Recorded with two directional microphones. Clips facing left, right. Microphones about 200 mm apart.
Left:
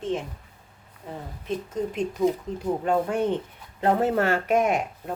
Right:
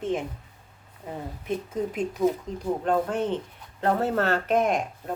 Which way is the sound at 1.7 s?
5° right (ahead or behind).